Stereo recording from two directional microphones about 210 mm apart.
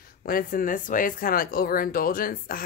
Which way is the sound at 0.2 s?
45° left (ahead or behind).